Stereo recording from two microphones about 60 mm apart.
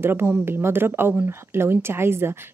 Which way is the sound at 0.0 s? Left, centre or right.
Right.